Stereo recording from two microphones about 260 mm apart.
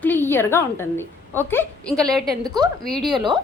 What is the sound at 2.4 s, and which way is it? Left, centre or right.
Speech, centre.